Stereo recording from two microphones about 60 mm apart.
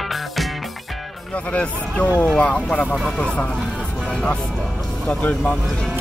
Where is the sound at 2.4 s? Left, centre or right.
Centre.